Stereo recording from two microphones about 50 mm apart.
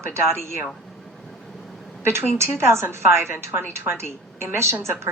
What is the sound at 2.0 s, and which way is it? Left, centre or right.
A woman's voice, right.